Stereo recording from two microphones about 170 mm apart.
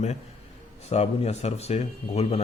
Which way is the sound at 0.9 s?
40° left (ahead or behind).